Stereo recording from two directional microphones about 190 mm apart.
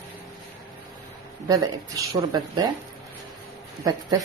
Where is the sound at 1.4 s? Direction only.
20° right (ahead or behind).